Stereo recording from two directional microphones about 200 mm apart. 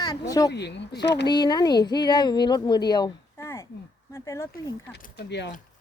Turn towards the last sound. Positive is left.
turn(degrees=60)  # may be behind; listen again after turning